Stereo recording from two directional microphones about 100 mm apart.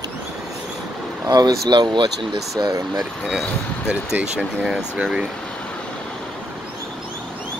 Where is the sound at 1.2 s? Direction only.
40° right (ahead or behind).